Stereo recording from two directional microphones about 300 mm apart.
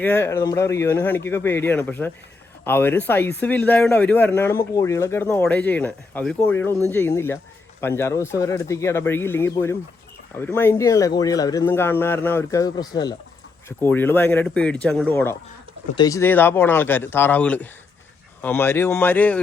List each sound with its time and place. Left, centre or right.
0.0 s speech: centre